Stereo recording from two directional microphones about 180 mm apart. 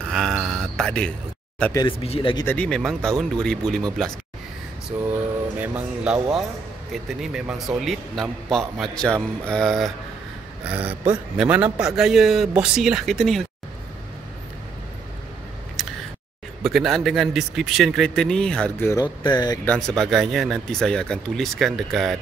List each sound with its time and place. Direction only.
0.1 s a sound: centre (ahead or behind)
1.7 s speech: 20° left (ahead or behind)
2.4 s a man's voice: 10° left (ahead or behind)
4.9 s a man's voice: 10° right (ahead or behind)
16.6 s a man's voice: centre (ahead or behind); by 19.6 s 25° left (ahead or behind)
20.0 s a man's voice: centre (ahead or behind)